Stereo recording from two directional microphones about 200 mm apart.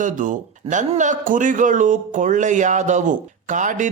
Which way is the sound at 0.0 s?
40° right (ahead or behind).